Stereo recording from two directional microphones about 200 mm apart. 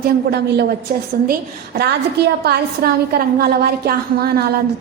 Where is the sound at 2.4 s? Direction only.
50° right (ahead or behind).